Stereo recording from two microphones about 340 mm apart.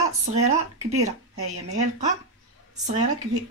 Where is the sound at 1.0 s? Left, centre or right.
Right.